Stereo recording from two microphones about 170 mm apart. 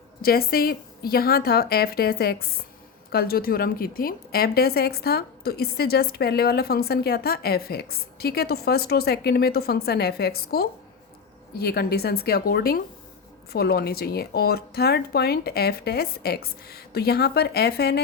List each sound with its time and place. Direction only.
0.2 s a woman's voice: 60° left (ahead or behind)